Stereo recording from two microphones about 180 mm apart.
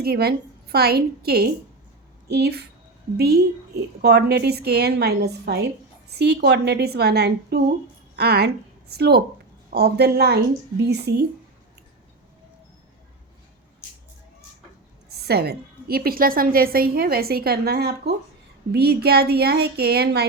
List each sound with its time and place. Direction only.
0.0 s a woman's voice: 60° right (ahead or behind)
15.3 s a woman's voice: 60° right (ahead or behind)